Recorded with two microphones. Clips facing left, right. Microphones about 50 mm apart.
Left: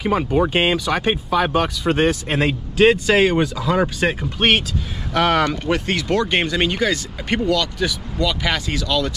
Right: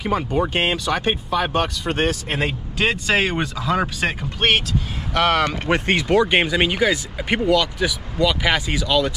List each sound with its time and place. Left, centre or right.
0.0 s speech: centre
5.7 s speech: right
6.0 s speech: centre